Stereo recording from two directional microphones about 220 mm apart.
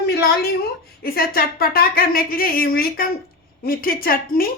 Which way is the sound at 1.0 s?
40° left (ahead or behind).